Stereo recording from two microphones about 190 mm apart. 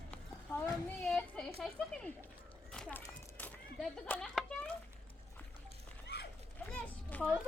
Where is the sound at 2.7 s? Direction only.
5° left (ahead or behind).